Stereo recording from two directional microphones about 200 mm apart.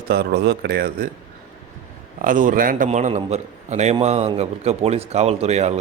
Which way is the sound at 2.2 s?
40° right (ahead or behind).